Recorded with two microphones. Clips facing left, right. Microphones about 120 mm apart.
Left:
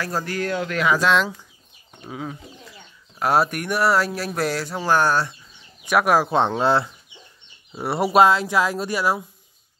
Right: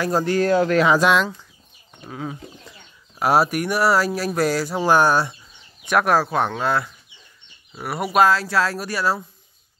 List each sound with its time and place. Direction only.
0.0 s speech: 25° right (ahead or behind)
2.0 s speech: 5° left (ahead or behind)
4.7 s speech: 15° right (ahead or behind)
5.9 s speech: 10° left (ahead or behind)
6.2 s speech: 20° left (ahead or behind)